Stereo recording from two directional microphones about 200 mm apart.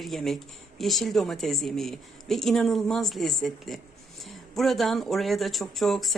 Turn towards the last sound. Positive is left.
turn(degrees=0)  # may be behind; listen again after turning